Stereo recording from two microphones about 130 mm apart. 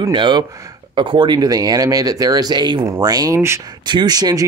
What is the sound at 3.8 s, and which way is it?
Speech, 35° right (ahead or behind).